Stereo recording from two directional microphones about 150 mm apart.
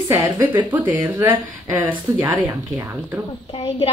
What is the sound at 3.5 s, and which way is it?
Speech, 35° left (ahead or behind).